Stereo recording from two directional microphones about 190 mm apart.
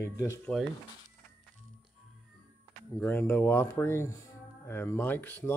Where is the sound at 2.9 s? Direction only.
10° left (ahead or behind).